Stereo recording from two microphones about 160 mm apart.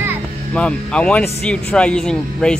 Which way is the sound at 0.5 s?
5° left (ahead or behind).